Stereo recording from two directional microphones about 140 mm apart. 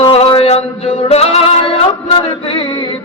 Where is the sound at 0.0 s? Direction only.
40° left (ahead or behind).